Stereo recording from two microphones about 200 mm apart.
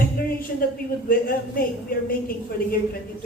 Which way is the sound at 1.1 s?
45° left (ahead or behind).